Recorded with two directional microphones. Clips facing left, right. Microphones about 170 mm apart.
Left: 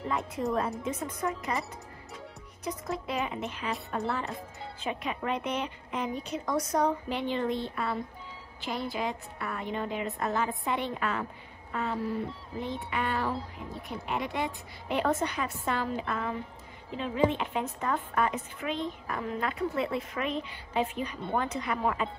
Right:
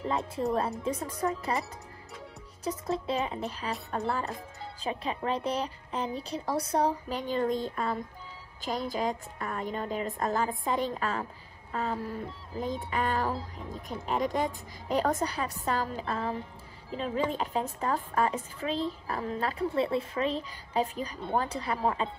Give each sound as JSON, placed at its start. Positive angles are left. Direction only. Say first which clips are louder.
{"t": 0.8, "sound": "a woman's voice", "louder": "right 2 dB", "side_deg": -35}
{"t": 2.6, "sound": "a woman's voice", "louder": "right 3 dB", "side_deg": -30}
{"t": 4.8, "sound": "a woman's voice", "louder": "right 1 dB", "side_deg": -30}
{"t": 11.7, "sound": "a sound", "louder": "even", "side_deg": -40}
{"t": 12.5, "sound": "a woman's voice", "louder": "right 2 dB", "side_deg": -40}